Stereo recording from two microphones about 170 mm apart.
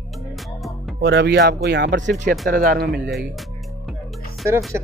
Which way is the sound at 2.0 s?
45° right (ahead or behind).